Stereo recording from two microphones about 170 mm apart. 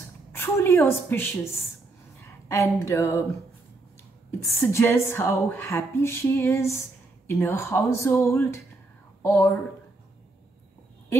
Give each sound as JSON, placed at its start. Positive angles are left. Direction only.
{"t": 0.3, "sound": "a woman's voice", "side_deg": 15}
{"t": 4.3, "sound": "a woman's voice", "side_deg": 15}